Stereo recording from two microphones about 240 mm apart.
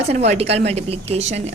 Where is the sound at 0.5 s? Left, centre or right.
Right.